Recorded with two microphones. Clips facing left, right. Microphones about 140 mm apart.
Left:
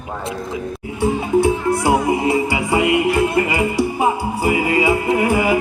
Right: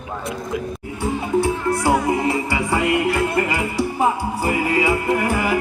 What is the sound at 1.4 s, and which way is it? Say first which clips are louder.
Music: left 3 dB; 20° left (ahead or behind).